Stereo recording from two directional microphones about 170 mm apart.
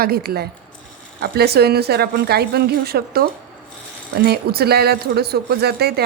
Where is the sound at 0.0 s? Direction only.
65° right (ahead or behind).